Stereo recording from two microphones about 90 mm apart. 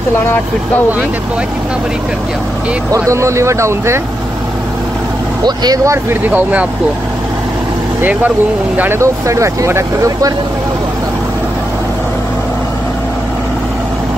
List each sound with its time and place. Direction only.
2.9 s speech: 35° right (ahead or behind)
5.4 s speech: 50° right (ahead or behind)
6.3 s speech: 15° right (ahead or behind)
8.0 s speech: 20° right (ahead or behind)
9.0 s speech: 35° right (ahead or behind)